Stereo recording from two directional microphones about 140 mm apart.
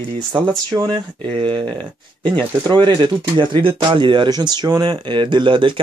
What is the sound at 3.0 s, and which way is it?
Speech, 35° right (ahead or behind).